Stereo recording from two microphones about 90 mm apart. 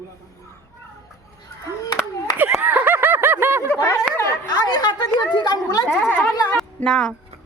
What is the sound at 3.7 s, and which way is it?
Speech, 25° left (ahead or behind).